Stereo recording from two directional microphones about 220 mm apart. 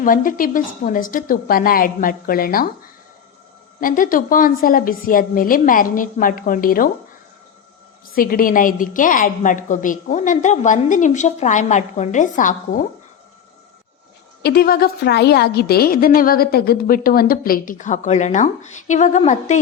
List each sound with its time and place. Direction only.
0.0 s a woman's voice: 40° left (ahead or behind)
3.8 s a woman's voice: 40° left (ahead or behind)
8.1 s a woman's voice: 40° left (ahead or behind)
14.4 s a woman's voice: 45° left (ahead or behind)